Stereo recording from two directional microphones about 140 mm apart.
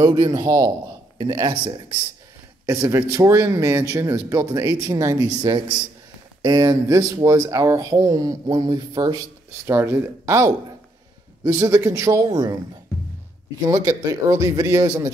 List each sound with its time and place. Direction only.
0.0 s speech: 30° right (ahead or behind)
2.6 s speech: 20° right (ahead or behind)
9.7 s speech: 15° right (ahead or behind)
13.7 s speech: 25° right (ahead or behind)